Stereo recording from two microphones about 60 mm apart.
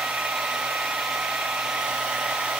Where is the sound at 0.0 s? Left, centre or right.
Centre.